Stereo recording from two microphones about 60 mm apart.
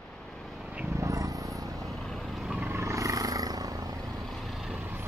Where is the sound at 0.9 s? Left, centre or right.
Right.